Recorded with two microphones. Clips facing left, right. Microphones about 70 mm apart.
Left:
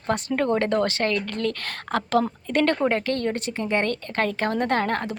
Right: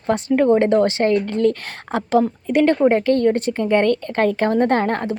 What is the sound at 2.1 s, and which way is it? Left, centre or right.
Speech, centre.